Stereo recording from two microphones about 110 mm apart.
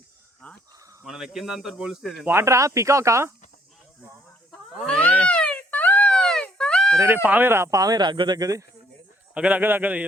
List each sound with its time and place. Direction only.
0.4 s speech: 10° left (ahead or behind)
1.0 s a man's voice: 5° right (ahead or behind)
2.2 s speech: 25° right (ahead or behind)
4.5 s a sound: 10° left (ahead or behind)
6.9 s speech: 25° right (ahead or behind)
9.3 s a man's voice: 10° right (ahead or behind)